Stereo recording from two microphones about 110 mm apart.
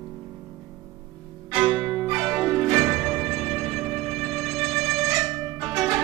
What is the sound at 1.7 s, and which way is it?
Music, centre (ahead or behind).